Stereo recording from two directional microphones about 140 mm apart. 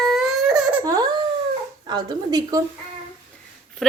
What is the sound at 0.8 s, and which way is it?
A woman's voice, 25° right (ahead or behind).